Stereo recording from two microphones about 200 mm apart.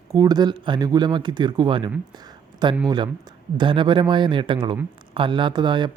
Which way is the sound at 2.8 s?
20° right (ahead or behind).